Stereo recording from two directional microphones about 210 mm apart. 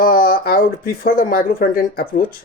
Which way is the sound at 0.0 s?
45° left (ahead or behind).